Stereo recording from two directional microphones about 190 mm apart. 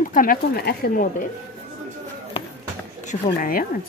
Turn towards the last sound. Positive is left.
turn(degrees=45)  # may be behind; listen again after turning